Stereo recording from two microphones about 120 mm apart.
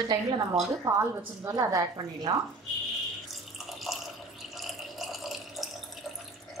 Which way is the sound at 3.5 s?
Centre (ahead or behind).